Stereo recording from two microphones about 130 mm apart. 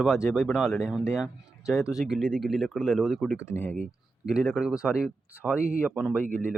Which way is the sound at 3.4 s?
15° left (ahead or behind).